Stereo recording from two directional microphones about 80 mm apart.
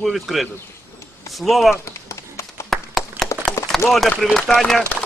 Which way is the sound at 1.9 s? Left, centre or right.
Left.